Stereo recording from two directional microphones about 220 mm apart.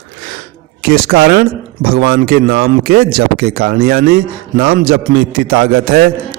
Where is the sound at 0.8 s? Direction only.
40° right (ahead or behind).